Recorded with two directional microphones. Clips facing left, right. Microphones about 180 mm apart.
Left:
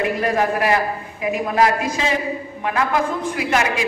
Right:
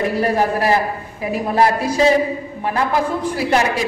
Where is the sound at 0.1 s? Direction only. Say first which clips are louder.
Right 2 dB; 35° right (ahead or behind).